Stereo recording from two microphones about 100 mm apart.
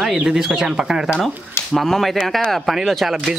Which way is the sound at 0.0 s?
5° right (ahead or behind).